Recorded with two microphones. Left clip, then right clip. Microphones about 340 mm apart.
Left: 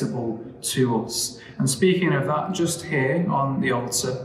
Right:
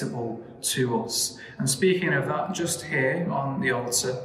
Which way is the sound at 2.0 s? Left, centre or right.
Centre.